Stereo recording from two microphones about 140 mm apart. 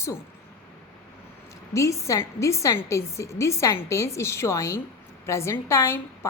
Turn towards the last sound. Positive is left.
turn(degrees=20)  # may be behind; listen again after turning